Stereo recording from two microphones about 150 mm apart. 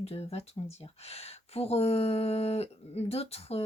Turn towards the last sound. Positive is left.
turn(degrees=40)  # may be behind; listen again after turning